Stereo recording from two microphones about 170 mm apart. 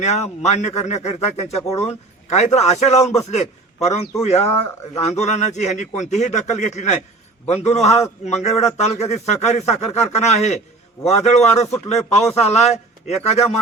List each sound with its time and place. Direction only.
0.0 s a man's voice: 40° left (ahead or behind)